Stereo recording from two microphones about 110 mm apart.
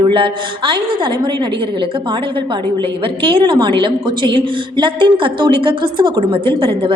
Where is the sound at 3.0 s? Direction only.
50° right (ahead or behind).